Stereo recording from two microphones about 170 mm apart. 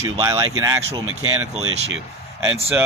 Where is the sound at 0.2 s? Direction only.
20° right (ahead or behind).